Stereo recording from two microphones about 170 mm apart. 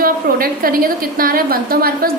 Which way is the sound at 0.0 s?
60° right (ahead or behind).